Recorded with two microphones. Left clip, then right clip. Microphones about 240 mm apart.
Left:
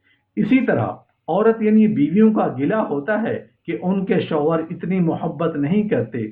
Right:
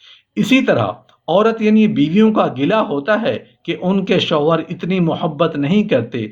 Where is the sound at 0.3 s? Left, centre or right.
Right.